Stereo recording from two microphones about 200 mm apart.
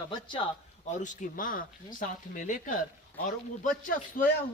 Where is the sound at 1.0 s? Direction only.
40° left (ahead or behind).